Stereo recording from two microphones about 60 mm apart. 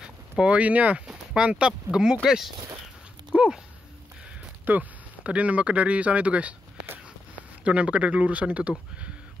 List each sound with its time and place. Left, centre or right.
0.0 s speech: centre
1.0 s speech: centre
3.3 s a sound: centre
4.6 s speech: right